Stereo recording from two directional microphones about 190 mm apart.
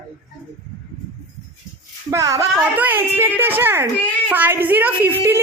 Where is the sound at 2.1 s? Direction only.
15° right (ahead or behind).